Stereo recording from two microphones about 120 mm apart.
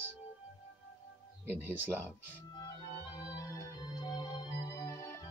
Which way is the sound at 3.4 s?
30° left (ahead or behind).